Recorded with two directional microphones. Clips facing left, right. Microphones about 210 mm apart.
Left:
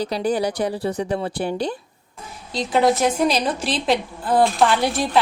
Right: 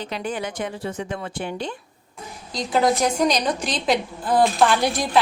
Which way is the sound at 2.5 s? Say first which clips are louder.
Left 2 dB; centre (ahead or behind).